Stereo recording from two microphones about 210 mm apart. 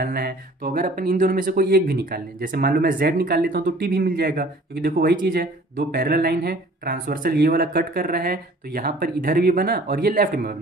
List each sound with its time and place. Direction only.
0.0 s speech: 50° right (ahead or behind)